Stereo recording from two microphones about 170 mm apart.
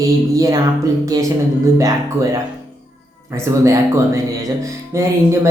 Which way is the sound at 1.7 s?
20° right (ahead or behind).